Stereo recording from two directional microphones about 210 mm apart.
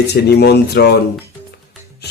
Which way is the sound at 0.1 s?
55° left (ahead or behind).